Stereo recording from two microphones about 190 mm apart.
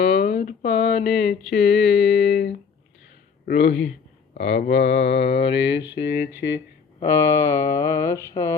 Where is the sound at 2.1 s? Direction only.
65° left (ahead or behind).